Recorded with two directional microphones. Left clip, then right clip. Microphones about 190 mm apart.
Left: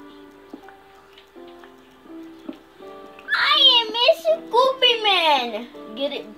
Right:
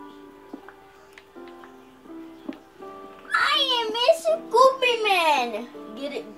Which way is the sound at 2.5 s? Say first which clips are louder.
Even; 10° left (ahead or behind).